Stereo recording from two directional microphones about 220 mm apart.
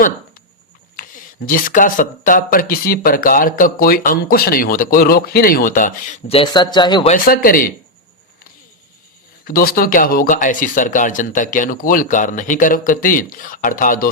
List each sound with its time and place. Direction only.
0.9 s speech: 40° left (ahead or behind); by 7.1 s 20° left (ahead or behind)
7.1 s speech: 40° left (ahead or behind)
9.4 s speech: 40° left (ahead or behind)